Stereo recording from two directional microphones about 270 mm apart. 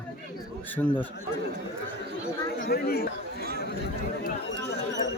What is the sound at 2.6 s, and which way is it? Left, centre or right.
Speech, left.